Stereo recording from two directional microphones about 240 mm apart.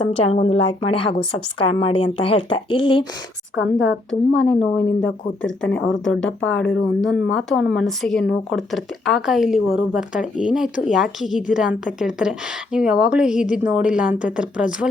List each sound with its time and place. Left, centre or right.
0.0 s a woman's voice: left
3.5 s a woman's voice: left
4.1 s a woman's voice: centre